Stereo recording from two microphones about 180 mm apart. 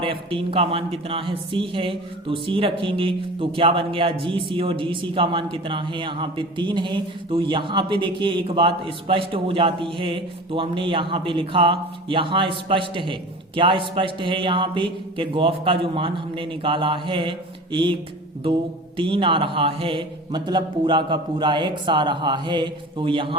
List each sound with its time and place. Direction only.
0.0 s speech: 30° right (ahead or behind)
18.9 s speech: 30° right (ahead or behind)